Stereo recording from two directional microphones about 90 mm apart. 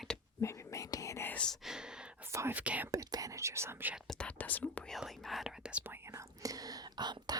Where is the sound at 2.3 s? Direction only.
30° right (ahead or behind).